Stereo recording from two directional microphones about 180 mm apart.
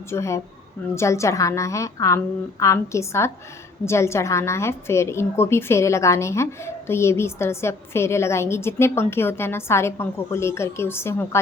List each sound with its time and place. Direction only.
0.1 s a woman's voice: 15° left (ahead or behind)